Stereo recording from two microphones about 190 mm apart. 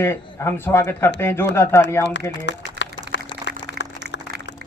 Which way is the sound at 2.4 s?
70° left (ahead or behind).